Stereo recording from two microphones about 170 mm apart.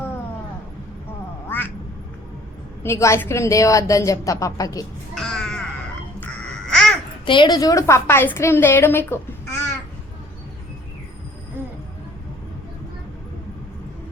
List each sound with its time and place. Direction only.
2.8 s a woman's voice: 15° left (ahead or behind)
5.1 s music: 5° left (ahead or behind)
6.7 s babbling: centre (ahead or behind)
7.3 s a woman's voice: 25° left (ahead or behind)